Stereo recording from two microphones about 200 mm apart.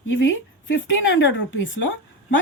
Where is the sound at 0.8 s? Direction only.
70° left (ahead or behind).